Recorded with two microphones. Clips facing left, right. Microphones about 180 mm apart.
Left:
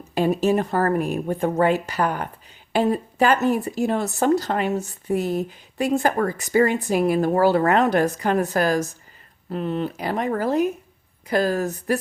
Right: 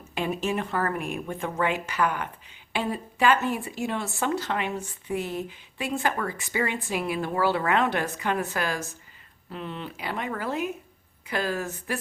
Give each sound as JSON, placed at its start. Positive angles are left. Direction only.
{"t": 0.1, "sound": "speech", "side_deg": 40}